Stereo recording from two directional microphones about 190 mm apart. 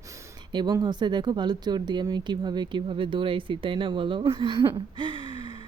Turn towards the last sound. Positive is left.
turn(degrees=-25)  # may be behind; listen again after turning